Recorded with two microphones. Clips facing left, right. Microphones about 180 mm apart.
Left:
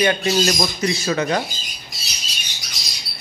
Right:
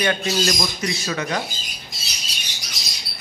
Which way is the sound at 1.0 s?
40° left (ahead or behind).